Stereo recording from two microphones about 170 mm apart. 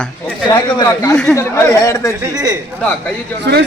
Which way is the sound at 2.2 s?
20° right (ahead or behind).